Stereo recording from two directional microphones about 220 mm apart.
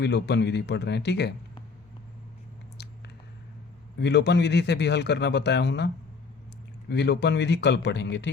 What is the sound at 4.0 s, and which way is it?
Speech, 50° left (ahead or behind).